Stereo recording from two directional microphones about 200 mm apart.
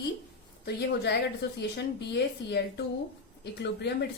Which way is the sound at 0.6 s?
55° left (ahead or behind).